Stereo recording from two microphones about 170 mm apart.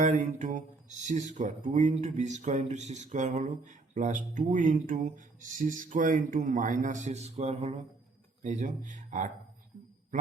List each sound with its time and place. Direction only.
0.0 s speech: 45° right (ahead or behind)
8.4 s speech: 50° right (ahead or behind)